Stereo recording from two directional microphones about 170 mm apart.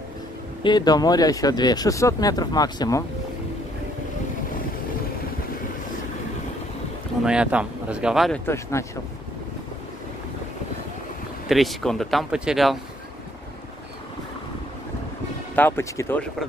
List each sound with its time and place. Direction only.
0.7 s speech: 25° left (ahead or behind)
7.2 s speech: 5° right (ahead or behind)
8.8 s speech: 15° left (ahead or behind)
11.4 s speech: centre (ahead or behind)
15.5 s speech: 10° left (ahead or behind)